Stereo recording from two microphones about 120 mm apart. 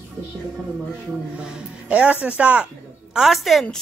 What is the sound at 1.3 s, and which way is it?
A woman's voice, 10° right (ahead or behind).